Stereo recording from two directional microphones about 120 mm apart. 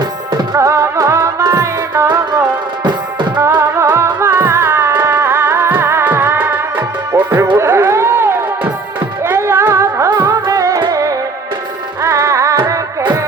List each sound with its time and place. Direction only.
0.3 s music: 30° right (ahead or behind)
2.8 s music: 40° right (ahead or behind)
3.4 s music: 25° right (ahead or behind)